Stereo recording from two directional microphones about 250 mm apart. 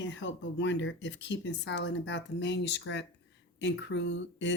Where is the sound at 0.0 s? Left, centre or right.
Left.